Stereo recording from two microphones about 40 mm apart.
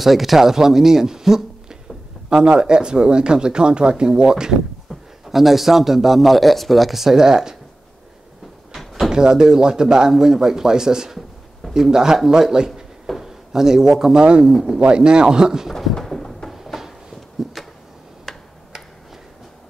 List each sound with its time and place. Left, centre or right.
0.0 s speech: centre
5.3 s speech: centre
8.7 s door: centre
9.1 s speech: centre
13.0 s a sound: centre
13.5 s speech: centre
14.2 s speech: right
14.5 s speech: centre
14.8 s speech: right
15.7 s a sound: centre
16.4 s a sound: centre
18.3 s tick-tock: centre